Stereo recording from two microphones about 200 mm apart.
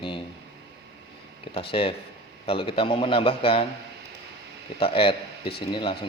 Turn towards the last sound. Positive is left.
turn(degrees=25)  # may be behind; listen again after turning